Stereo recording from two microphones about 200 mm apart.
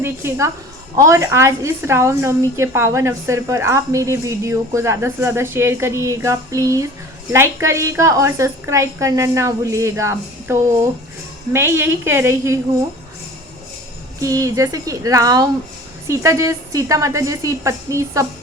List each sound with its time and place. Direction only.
0.0 s a woman's voice: 10° right (ahead or behind)
14.2 s a woman's voice: 15° right (ahead or behind)